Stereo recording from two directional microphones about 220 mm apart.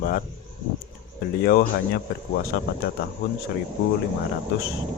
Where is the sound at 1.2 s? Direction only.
45° left (ahead or behind).